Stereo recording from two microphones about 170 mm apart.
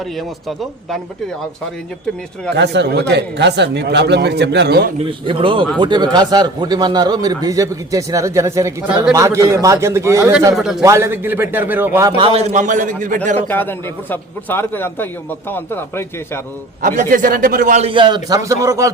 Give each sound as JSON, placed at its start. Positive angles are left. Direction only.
{"t": 0.0, "sound": "speech", "side_deg": 0}
{"t": 2.6, "sound": "speech", "side_deg": -85}
{"t": 4.9, "sound": "a man's voice", "side_deg": -30}
{"t": 10.6, "sound": "speech", "side_deg": -5}
{"t": 10.8, "sound": "a man's voice", "side_deg": -15}
{"t": 12.1, "sound": "a man's voice", "side_deg": -35}
{"t": 13.5, "sound": "a man's voice", "side_deg": 10}
{"t": 16.8, "sound": "a man's voice", "side_deg": -50}
{"t": 17.8, "sound": "a man's voice", "side_deg": -30}